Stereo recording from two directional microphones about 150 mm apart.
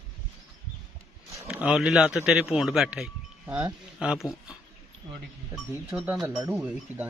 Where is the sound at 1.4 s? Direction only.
5° right (ahead or behind).